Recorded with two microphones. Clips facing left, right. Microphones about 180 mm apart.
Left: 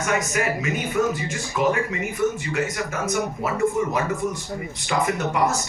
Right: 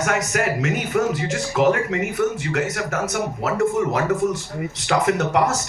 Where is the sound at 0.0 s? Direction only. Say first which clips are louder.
Right 2 dB; 75° right (ahead or behind).